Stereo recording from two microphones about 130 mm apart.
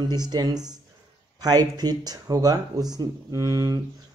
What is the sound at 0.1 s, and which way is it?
Speech, 30° right (ahead or behind).